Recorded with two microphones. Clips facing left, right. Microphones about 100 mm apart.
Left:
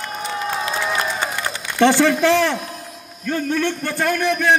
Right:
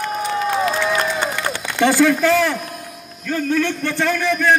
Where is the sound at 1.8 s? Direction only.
30° left (ahead or behind).